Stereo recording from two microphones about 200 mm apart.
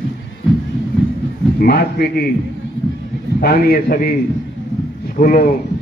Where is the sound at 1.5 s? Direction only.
50° left (ahead or behind).